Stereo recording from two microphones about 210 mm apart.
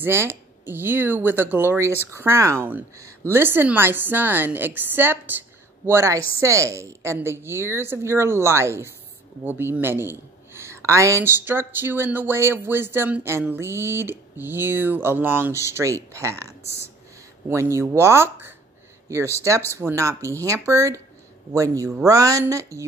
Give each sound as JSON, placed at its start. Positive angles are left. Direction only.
{"t": 0.0, "sound": "speech", "side_deg": -10}
{"t": 17.5, "sound": "speech", "side_deg": -15}